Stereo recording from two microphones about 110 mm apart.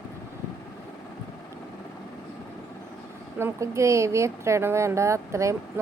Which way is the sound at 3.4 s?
25° right (ahead or behind).